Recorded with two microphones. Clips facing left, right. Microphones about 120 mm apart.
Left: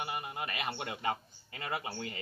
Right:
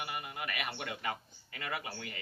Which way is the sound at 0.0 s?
30° left (ahead or behind).